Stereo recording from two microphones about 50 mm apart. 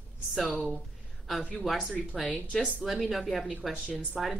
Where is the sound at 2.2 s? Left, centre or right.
Centre.